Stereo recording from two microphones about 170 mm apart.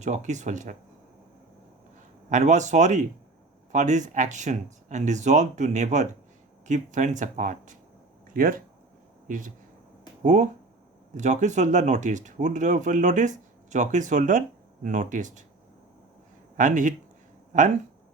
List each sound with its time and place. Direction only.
0.0 s speech: 45° right (ahead or behind)
2.3 s speech: 45° right (ahead or behind)
16.6 s speech: 50° right (ahead or behind)